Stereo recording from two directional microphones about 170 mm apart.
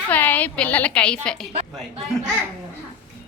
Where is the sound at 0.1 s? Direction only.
10° left (ahead or behind).